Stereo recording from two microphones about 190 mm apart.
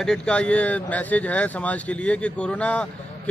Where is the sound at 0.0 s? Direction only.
5° left (ahead or behind).